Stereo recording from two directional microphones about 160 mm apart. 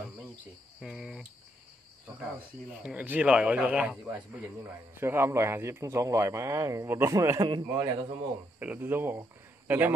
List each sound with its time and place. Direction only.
0.7 s cricket: centre (ahead or behind)
2.8 s a man's voice: 10° right (ahead or behind); by 8.2 s 25° right (ahead or behind)
8.5 s a man's voice: 10° right (ahead or behind)